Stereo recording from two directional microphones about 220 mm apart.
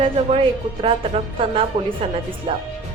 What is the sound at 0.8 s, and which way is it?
A woman's voice, 25° right (ahead or behind).